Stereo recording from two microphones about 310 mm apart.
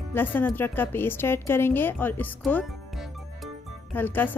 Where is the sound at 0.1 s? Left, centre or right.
Centre.